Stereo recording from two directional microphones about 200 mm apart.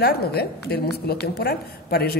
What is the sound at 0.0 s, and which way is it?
A woman's voice, 50° left (ahead or behind).